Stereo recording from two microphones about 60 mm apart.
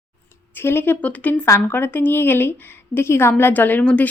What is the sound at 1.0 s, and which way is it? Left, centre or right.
A woman's voice, left.